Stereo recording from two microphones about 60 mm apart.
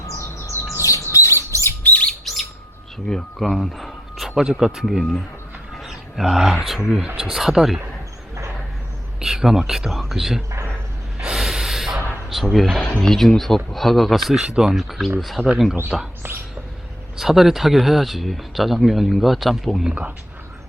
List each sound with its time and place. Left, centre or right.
0.2 s bird: left
1.1 s a sound: left
1.8 s chirp: left
2.2 s bird: centre
3.1 s speech: centre
9.2 s speech: centre
11.2 s gasp: centre
12.5 s speech: centre
14.3 s speech: centre
15.4 s speech: left
15.9 s speech: centre
17.2 s speech: centre